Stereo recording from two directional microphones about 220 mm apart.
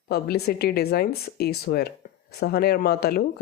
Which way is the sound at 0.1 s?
45° left (ahead or behind).